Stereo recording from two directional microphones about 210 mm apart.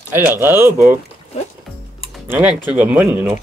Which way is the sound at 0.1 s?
10° right (ahead or behind).